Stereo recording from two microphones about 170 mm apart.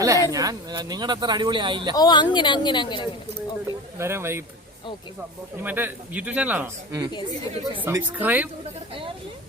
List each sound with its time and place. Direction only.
0.0 s speech: 20° right (ahead or behind)
2.0 s speech: 25° left (ahead or behind)
3.9 s speech: 15° right (ahead or behind)
5.6 s speech: 10° right (ahead or behind)